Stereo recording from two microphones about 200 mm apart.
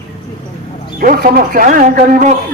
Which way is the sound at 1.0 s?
45° right (ahead or behind).